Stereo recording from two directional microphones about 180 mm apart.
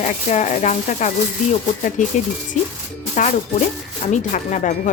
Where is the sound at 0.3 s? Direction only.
40° left (ahead or behind).